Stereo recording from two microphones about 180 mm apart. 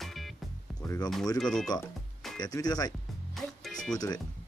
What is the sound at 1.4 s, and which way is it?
Speech, 5° left (ahead or behind).